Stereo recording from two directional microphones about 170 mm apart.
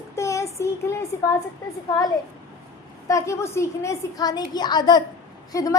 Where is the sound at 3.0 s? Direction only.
20° left (ahead or behind).